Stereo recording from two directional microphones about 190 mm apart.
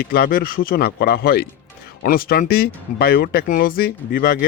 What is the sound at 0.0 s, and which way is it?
Speech, 55° left (ahead or behind).